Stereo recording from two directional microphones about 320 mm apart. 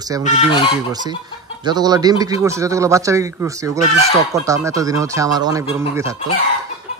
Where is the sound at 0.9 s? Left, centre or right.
Centre.